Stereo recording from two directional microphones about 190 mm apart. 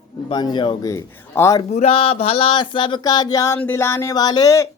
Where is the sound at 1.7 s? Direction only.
30° left (ahead or behind).